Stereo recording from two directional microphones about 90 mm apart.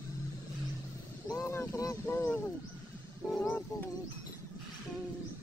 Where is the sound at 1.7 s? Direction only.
40° left (ahead or behind).